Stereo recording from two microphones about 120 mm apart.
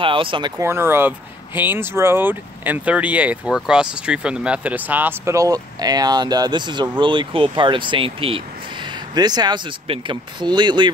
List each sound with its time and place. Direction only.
0.0 s speech: 45° right (ahead or behind)
0.6 s speech: 20° right (ahead or behind); by 10.9 s 40° right (ahead or behind)